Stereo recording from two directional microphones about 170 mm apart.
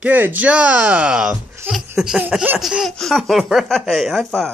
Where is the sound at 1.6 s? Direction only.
15° right (ahead or behind).